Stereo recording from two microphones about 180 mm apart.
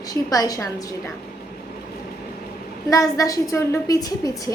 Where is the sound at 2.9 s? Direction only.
20° left (ahead or behind).